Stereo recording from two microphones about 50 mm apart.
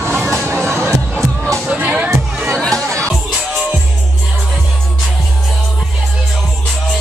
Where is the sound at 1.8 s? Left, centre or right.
Right.